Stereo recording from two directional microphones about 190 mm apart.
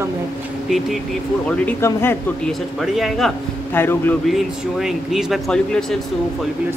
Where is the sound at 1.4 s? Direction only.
10° left (ahead or behind).